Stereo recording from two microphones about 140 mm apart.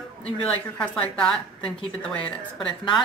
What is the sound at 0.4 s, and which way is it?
A man's voice, 5° left (ahead or behind).